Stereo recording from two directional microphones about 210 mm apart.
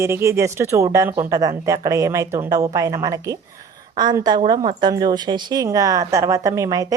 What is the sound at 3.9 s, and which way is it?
A woman's voice, 20° right (ahead or behind).